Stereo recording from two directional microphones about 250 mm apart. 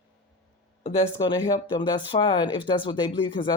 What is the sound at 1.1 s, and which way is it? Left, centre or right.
Speech, centre.